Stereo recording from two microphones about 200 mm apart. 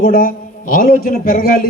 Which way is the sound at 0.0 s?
45° left (ahead or behind).